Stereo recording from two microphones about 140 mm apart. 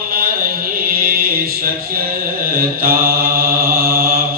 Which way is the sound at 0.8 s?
90° right.